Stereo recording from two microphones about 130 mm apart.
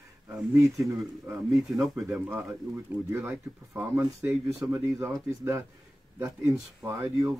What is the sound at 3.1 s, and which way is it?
Speech, 15° right (ahead or behind).